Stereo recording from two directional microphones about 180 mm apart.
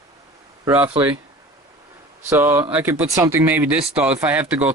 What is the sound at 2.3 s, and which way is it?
Speech, 15° right (ahead or behind).